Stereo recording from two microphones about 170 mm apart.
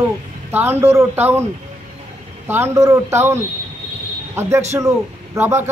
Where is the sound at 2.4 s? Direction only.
15° right (ahead or behind).